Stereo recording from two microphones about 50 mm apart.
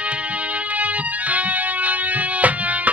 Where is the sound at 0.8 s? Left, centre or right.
Right.